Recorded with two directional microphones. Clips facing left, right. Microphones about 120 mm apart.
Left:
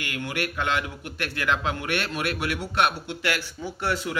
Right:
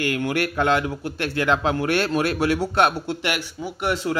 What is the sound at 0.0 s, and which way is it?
A man's voice, 45° right (ahead or behind).